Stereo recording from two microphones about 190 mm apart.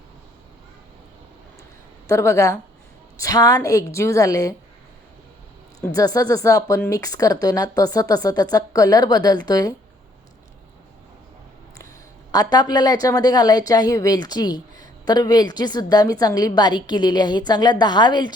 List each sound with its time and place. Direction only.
2.0 s a woman's voice: 15° left (ahead or behind)
5.8 s a woman's voice: 20° left (ahead or behind)
12.3 s a woman's voice: 20° left (ahead or behind)